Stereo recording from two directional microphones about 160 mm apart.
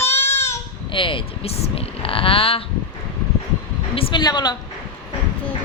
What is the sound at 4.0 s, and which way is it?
Speech, 30° left (ahead or behind).